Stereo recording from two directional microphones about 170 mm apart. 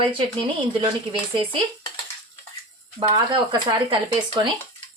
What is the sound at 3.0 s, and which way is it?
Speech, 25° right (ahead or behind).